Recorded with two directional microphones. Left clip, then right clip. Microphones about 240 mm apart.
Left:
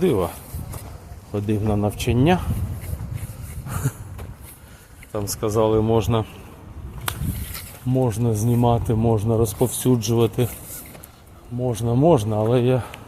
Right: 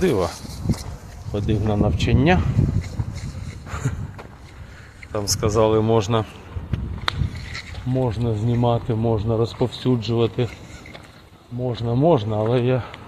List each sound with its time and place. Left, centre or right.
0.0 s speech: centre
3.7 s a sound: centre
5.1 s speech: centre
7.3 s speech: left
11.6 s speech: centre